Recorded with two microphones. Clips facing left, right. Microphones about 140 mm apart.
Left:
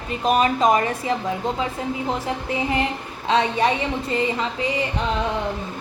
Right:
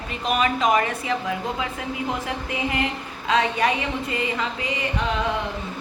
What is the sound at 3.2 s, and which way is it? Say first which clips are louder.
A woman's voice: left 2 dB; 30° left (ahead or behind).